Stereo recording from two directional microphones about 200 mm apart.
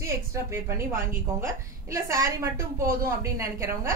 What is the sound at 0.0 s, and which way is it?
A woman's voice, 15° right (ahead or behind).